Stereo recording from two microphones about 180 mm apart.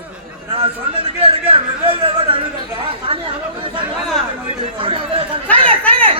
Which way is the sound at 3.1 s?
30° right (ahead or behind).